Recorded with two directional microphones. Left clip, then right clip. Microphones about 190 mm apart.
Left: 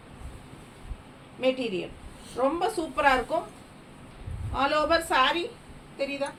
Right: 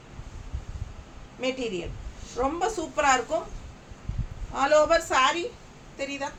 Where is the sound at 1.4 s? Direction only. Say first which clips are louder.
Left 2 dB; 15° right (ahead or behind).